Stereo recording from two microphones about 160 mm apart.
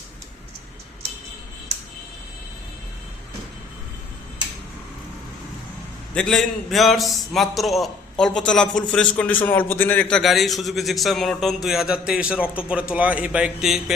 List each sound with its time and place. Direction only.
6.1 s a man's voice: 5° left (ahead or behind)